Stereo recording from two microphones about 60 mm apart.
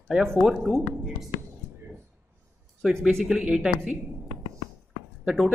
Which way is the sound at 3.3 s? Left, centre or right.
Centre.